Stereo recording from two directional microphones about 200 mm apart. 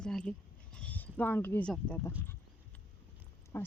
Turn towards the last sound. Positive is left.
turn(degrees=15)  # may be behind; listen again after turning